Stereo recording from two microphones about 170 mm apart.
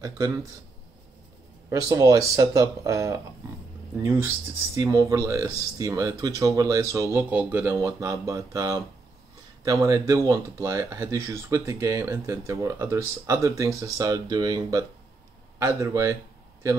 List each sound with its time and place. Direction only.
1.7 s speech: 20° right (ahead or behind)